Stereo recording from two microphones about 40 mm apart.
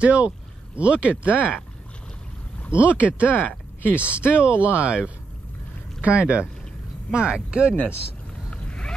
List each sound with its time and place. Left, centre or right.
0.0 s speech: right
2.7 s speech: right
3.3 s a sound: left
3.9 s speech: right
8.5 s boat: left